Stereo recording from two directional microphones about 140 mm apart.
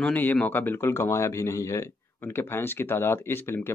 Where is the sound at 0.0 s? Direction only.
10° left (ahead or behind).